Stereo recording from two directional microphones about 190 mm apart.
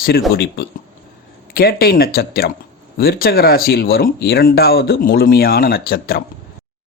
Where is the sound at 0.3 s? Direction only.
60° left (ahead or behind).